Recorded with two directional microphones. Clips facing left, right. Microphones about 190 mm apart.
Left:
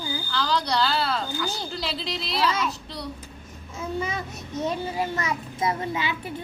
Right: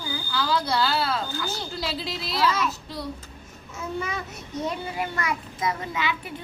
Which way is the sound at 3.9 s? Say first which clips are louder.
Left 2 dB; 25° left (ahead or behind).